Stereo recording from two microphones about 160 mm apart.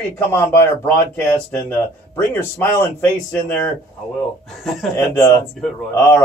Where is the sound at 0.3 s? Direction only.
15° left (ahead or behind).